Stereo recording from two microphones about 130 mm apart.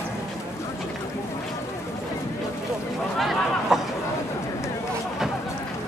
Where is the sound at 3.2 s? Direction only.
Centre (ahead or behind).